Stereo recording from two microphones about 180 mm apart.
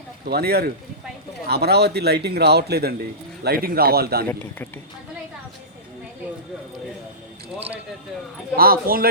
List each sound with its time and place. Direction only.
0.3 s a man's voice: 60° right (ahead or behind)
4.3 s speech: 10° left (ahead or behind)
8.5 s a man's voice: 55° right (ahead or behind)